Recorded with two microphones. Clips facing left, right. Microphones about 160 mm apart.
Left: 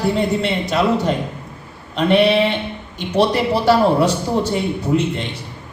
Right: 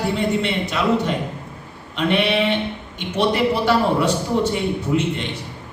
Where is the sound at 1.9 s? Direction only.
35° left (ahead or behind).